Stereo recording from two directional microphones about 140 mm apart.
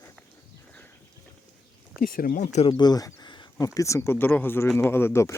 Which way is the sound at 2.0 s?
90° left.